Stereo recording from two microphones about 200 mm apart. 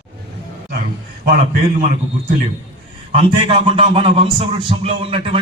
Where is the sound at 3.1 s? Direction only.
30° right (ahead or behind).